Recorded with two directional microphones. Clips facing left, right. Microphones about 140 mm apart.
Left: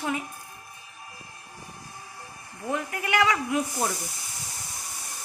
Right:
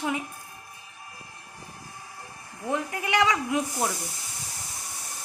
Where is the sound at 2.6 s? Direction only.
20° right (ahead or behind).